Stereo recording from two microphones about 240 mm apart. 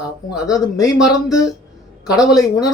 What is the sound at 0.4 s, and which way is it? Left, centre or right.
Speech, centre.